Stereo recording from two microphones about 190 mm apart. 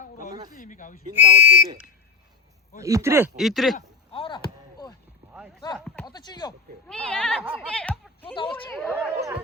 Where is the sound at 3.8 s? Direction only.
30° left (ahead or behind).